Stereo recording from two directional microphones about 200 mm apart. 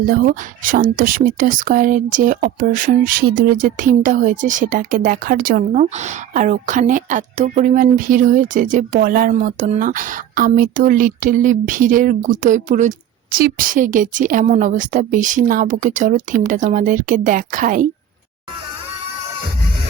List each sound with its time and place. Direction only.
0.0 s speech: 45° right (ahead or behind)